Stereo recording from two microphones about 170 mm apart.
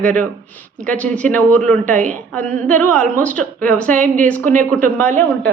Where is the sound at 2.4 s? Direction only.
50° right (ahead or behind).